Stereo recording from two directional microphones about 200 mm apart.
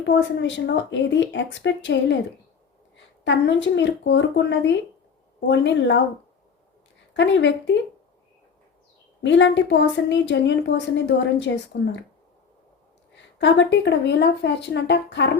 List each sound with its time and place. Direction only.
0.0 s a woman's voice: 60° left (ahead or behind)
3.2 s a woman's voice: 60° left (ahead or behind)
7.1 s a woman's voice: 65° left (ahead or behind)
9.2 s a woman's voice: 65° left (ahead or behind)
13.4 s a woman's voice: 65° left (ahead or behind)